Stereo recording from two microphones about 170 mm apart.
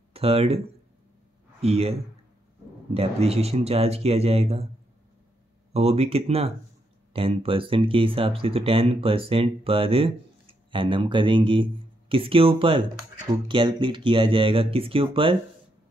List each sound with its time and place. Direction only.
0.1 s speech: 35° right (ahead or behind)
1.6 s speech: 35° right (ahead or behind)
5.7 s speech: 35° right (ahead or behind)